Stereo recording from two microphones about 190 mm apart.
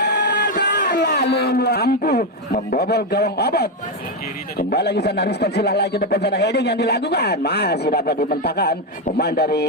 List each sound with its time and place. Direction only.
0.0 s a man's voice: 60° left (ahead or behind)